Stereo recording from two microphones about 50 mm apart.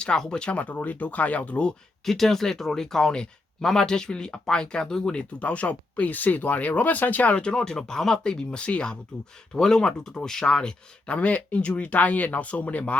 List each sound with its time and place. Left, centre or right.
0.0 s speech: centre
2.0 s speech: centre
5.4 s speech: left